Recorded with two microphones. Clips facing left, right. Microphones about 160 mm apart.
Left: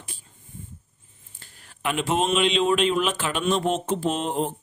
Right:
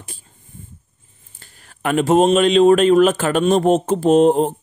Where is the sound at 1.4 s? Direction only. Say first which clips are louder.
Right 6 dB; 50° right (ahead or behind).